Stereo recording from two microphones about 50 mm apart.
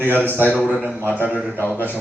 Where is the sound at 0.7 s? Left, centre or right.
Right.